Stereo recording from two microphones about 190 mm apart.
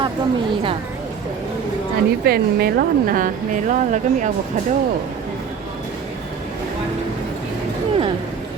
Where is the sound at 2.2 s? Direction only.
55° right (ahead or behind).